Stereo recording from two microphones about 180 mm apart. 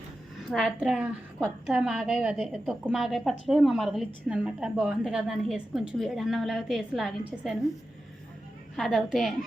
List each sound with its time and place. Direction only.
0.5 s a woman's voice: 5° right (ahead or behind)
8.7 s a woman's voice: centre (ahead or behind)